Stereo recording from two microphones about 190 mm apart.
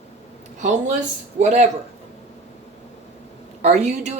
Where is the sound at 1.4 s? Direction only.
35° right (ahead or behind).